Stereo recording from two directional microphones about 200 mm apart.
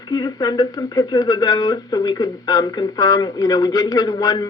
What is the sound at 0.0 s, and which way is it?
Speech, 20° left (ahead or behind).